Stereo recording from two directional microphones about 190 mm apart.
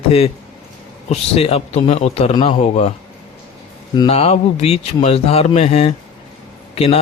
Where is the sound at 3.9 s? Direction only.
30° left (ahead or behind).